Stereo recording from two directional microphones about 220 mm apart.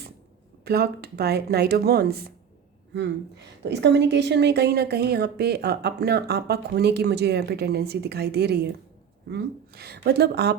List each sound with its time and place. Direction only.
0.6 s a woman's voice: 45° right (ahead or behind)
3.6 s a woman's voice: 50° right (ahead or behind)